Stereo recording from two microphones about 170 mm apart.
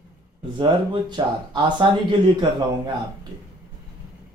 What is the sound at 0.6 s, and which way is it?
Speech, 30° right (ahead or behind).